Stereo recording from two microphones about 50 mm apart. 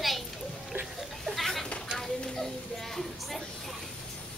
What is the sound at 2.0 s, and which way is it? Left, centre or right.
Music, centre.